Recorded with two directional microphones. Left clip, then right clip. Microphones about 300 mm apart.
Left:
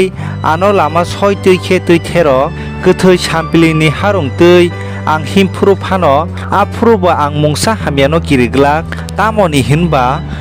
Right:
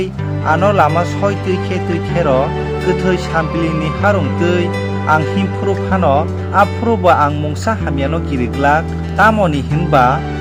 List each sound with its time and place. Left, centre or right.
0.0 s speech: left